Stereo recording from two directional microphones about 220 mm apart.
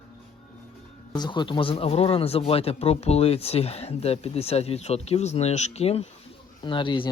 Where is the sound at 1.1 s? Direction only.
20° left (ahead or behind).